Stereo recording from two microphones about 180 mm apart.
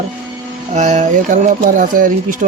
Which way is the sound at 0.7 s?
40° right (ahead or behind).